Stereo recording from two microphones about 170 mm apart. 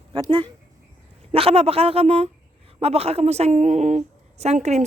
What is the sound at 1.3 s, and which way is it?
A woman's voice, 35° right (ahead or behind).